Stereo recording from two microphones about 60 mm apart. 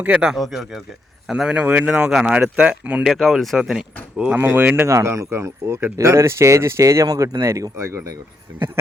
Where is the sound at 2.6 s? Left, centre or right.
Right.